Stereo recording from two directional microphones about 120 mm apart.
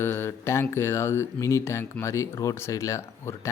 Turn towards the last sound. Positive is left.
turn(degrees=25)  # may be behind; listen again after turning